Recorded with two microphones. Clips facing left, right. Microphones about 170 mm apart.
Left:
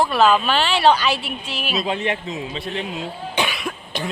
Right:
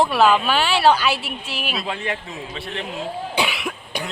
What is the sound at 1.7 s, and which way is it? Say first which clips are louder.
A man's voice: left 6 dB; 20° left (ahead or behind).